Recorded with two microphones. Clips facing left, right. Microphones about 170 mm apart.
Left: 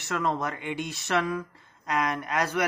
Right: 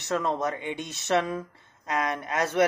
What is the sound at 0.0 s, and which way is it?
Speech, 20° right (ahead or behind).